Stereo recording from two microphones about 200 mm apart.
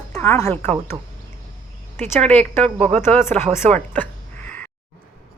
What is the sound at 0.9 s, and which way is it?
Speech, 20° right (ahead or behind).